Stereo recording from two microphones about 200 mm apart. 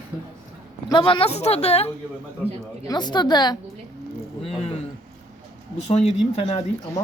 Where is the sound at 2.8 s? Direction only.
20° left (ahead or behind).